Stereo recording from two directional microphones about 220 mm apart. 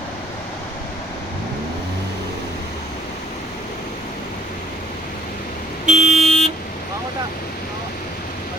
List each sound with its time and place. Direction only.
5.8 s vehicle: 35° right (ahead or behind)
6.2 s vehicle: centre (ahead or behind)